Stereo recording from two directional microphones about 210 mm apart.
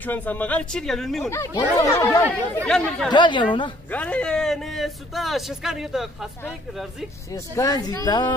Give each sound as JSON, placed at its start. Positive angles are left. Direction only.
{"t": 0.0, "sound": "speech", "side_deg": 10}
{"t": 1.3, "sound": "speech", "side_deg": 15}
{"t": 2.6, "sound": "speech", "side_deg": 5}
{"t": 3.1, "sound": "speech", "side_deg": 20}
{"t": 3.9, "sound": "speech", "side_deg": 5}
{"t": 7.5, "sound": "speech", "side_deg": 15}